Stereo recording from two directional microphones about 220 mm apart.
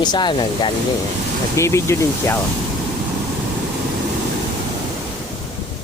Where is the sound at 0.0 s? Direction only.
20° left (ahead or behind).